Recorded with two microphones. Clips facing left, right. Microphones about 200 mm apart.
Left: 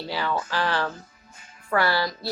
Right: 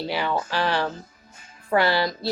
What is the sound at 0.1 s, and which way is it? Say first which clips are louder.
Speech: even; 20° right (ahead or behind).